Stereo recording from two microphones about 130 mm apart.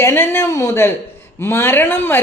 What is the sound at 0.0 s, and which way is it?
Speech, 20° left (ahead or behind).